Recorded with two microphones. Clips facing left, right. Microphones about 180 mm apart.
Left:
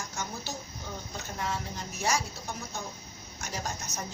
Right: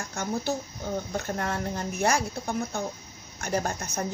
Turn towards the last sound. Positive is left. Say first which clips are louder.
# right 7 dB
turn(degrees=-55)  # may be behind; listen again after turning